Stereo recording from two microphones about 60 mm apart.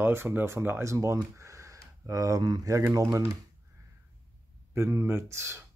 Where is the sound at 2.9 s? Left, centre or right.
Right.